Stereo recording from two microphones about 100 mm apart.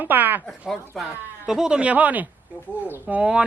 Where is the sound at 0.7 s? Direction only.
Centre (ahead or behind).